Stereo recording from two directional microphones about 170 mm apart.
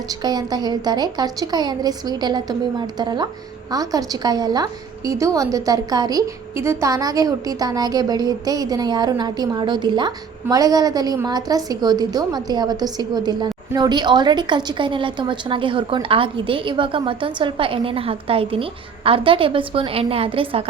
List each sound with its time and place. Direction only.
0.1 s a woman's voice: 25° right (ahead or behind)